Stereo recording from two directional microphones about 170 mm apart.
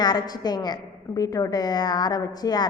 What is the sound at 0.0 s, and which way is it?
A woman's voice, 25° left (ahead or behind).